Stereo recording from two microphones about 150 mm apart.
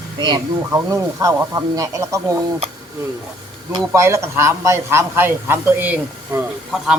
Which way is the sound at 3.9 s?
20° right (ahead or behind).